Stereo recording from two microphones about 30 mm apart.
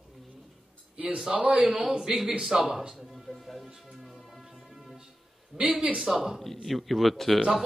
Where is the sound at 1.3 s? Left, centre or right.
Right.